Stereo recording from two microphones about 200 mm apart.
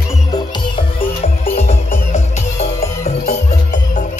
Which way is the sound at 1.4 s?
35° left (ahead or behind).